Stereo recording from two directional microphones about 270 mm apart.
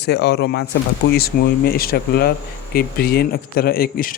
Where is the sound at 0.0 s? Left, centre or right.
Left.